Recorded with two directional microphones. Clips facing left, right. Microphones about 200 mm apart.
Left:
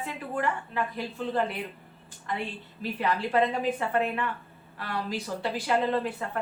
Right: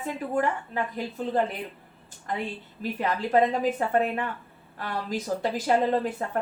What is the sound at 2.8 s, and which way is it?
A woman's voice, 45° right (ahead or behind).